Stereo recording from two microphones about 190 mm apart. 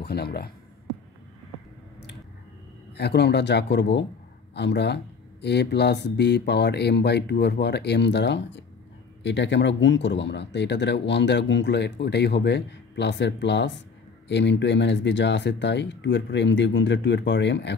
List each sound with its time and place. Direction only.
0.0 s speech: 60° left (ahead or behind)
2.9 s speech: 60° left (ahead or behind)